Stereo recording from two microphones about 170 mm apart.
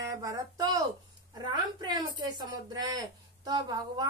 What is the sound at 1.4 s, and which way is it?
A woman's voice, 25° right (ahead or behind).